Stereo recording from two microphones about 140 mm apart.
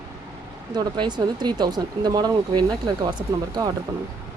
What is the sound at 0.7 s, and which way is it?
Speech, 30° right (ahead or behind).